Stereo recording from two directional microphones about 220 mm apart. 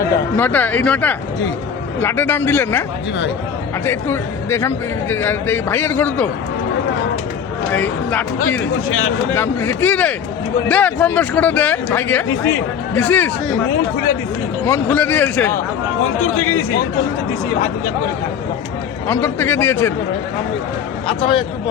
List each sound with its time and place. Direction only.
0.0 s speech: 10° left (ahead or behind)
3.8 s speech: 10° left (ahead or behind)
7.7 s speech: 5° left (ahead or behind)
8.9 s speech: 65° left (ahead or behind)
9.3 s speech: 10° left (ahead or behind)
14.6 s speech: 10° left (ahead or behind)
16.2 s speech: 70° left (ahead or behind)
19.0 s speech: 10° left (ahead or behind)
21.1 s a man's voice: 25° left (ahead or behind)